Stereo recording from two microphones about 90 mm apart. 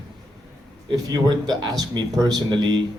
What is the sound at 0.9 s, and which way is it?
Speech, 45° right (ahead or behind).